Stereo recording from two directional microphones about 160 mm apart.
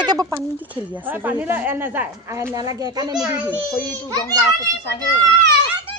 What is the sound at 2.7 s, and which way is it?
Speech, 25° right (ahead or behind).